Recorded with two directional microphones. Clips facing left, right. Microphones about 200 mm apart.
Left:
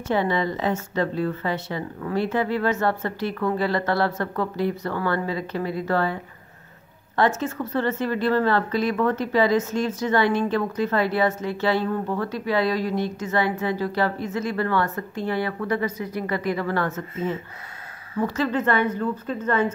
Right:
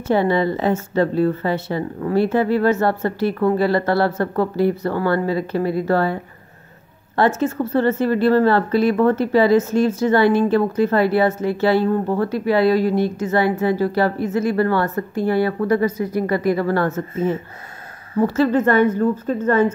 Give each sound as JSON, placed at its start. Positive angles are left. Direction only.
{"t": 0.1, "sound": "speech", "side_deg": -35}
{"t": 7.2, "sound": "a woman's voice", "side_deg": -35}